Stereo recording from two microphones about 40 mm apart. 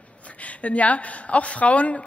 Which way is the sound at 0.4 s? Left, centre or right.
Left.